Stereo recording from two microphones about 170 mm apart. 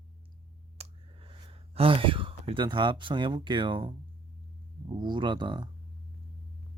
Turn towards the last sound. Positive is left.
turn(degrees=-25)  # may be behind; listen again after turning